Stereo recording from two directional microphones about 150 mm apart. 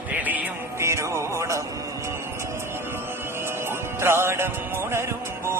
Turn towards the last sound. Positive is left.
turn(degrees=-15)  # may be behind; listen again after turning